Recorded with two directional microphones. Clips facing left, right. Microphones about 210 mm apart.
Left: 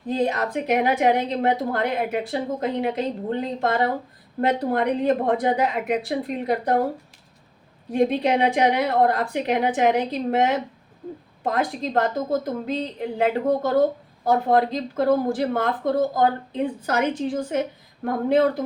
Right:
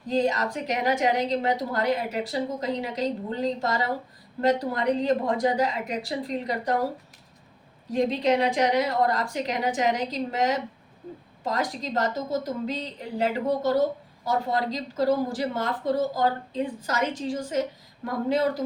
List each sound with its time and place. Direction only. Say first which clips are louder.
0.1 s a woman's voice: left 1 dB; 55° left (ahead or behind)
7.9 s a woman's voice: left 3 dB; 55° left (ahead or behind)